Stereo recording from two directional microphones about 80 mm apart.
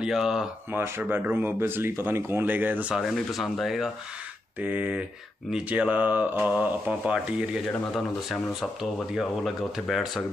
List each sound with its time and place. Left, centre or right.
0.0 s speech: centre
0.7 s speech: right
3.0 s speech: centre
4.6 s speech: right
7.9 s speech: centre